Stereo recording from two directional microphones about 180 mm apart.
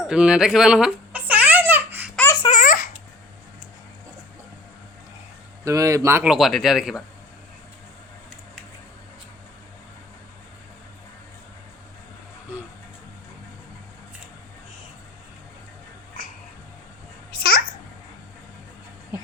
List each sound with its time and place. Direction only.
0.0 s babbling: 5° right (ahead or behind)
2.5 s babbling: 45° left (ahead or behind)
5.6 s speech: 20° right (ahead or behind)
6.2 s speech: centre (ahead or behind)
17.3 s babbling: 55° left (ahead or behind)